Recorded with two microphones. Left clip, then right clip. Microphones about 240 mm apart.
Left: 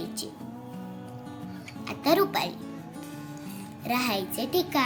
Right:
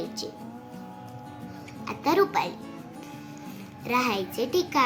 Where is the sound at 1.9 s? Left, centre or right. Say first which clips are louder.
Even; left.